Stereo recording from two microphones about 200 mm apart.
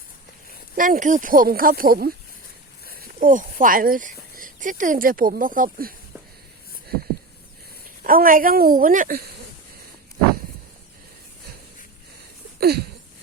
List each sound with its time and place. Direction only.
0.8 s speech: 40° right (ahead or behind)
8.0 s speech: 45° right (ahead or behind)
12.5 s a sound: 55° right (ahead or behind)